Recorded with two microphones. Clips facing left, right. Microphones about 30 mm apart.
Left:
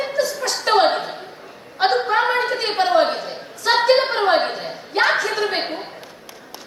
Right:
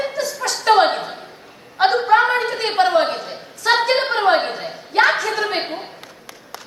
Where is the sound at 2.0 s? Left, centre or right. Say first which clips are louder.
Right 3 dB; centre.